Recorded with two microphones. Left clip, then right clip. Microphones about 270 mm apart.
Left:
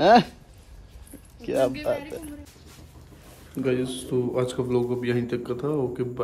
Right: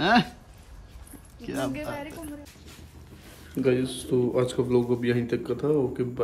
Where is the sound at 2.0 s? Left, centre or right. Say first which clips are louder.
Left 1 dB; centre.